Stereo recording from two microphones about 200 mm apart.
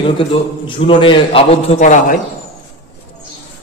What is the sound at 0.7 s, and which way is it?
A man's voice, 25° left (ahead or behind).